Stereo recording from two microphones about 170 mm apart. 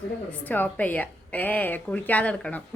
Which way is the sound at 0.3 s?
10° left (ahead or behind).